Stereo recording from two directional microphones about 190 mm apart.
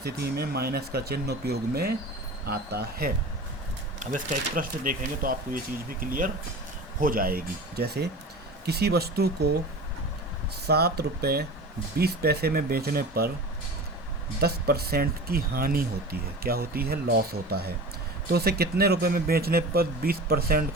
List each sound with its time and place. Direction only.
0.0 s speech: 55° right (ahead or behind)
4.0 s speech: 40° right (ahead or behind)
10.7 s speech: 55° right (ahead or behind)
14.4 s speech: 55° right (ahead or behind)